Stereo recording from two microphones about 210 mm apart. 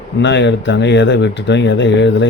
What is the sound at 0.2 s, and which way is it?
Speech, 60° left (ahead or behind).